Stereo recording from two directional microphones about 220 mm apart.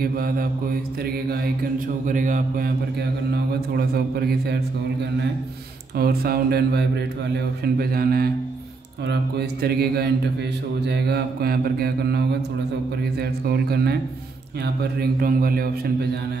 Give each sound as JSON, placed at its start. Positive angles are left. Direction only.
{"t": 0.0, "sound": "mantra", "side_deg": -40}
{"t": 2.0, "sound": "mantra", "side_deg": -35}
{"t": 3.7, "sound": "mantra", "side_deg": -45}
{"t": 5.9, "sound": "mantra", "side_deg": -45}